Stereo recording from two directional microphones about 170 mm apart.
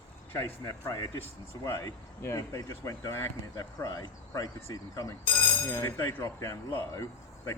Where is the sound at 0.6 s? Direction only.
20° left (ahead or behind).